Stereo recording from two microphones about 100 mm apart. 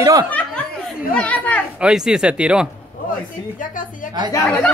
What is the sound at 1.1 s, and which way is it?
Speech, 15° left (ahead or behind).